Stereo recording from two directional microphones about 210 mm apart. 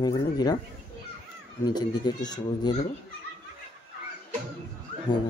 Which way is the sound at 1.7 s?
20° left (ahead or behind).